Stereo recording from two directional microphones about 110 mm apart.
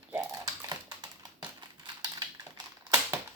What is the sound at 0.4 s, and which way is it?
Typing, 40° right (ahead or behind).